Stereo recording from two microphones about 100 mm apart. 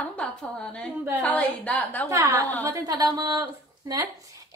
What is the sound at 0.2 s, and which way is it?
A woman's voice, 5° left (ahead or behind).